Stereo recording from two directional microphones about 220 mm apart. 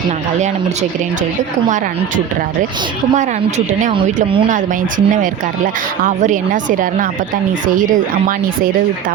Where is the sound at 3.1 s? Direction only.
35° right (ahead or behind).